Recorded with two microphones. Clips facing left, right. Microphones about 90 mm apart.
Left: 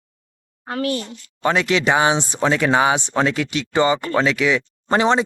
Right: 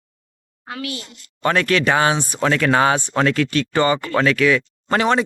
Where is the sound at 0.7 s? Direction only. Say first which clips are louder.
Left 7 dB; 40° left (ahead or behind).